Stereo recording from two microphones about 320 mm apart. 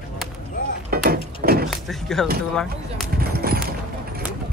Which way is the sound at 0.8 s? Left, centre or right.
Right.